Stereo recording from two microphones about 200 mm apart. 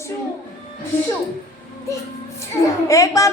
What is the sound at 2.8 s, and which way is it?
Speech, 15° left (ahead or behind).